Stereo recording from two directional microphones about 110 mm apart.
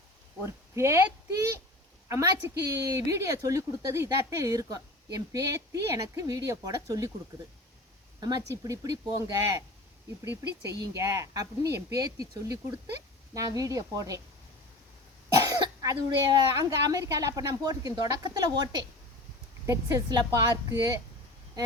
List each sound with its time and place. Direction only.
0.8 s a woman's voice: 25° right (ahead or behind)
8.2 s a woman's voice: 35° right (ahead or behind)
15.4 s cough: 35° right (ahead or behind)
16.6 s speech: 30° right (ahead or behind)